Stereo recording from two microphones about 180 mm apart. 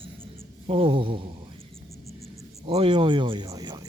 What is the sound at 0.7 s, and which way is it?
Speech, 30° right (ahead or behind).